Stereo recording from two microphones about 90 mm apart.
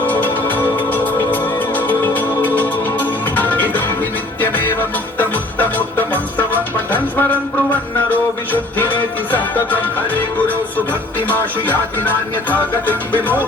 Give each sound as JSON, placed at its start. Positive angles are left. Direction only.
{"t": 0.0, "sound": "music", "side_deg": 20}